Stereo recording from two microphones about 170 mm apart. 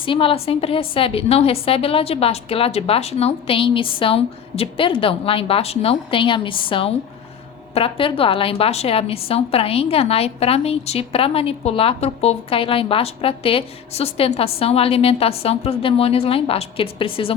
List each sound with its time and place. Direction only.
0.0 s a woman's voice: 30° left (ahead or behind)